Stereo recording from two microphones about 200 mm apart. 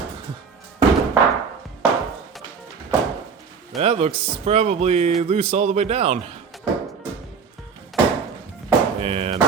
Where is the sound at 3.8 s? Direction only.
30° right (ahead or behind).